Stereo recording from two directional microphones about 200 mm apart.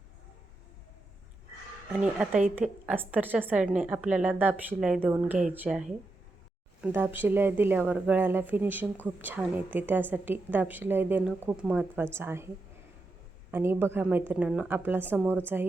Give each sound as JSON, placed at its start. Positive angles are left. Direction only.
{"t": 1.9, "sound": "a woman's voice", "side_deg": -5}
{"t": 13.5, "sound": "a woman's voice", "side_deg": -10}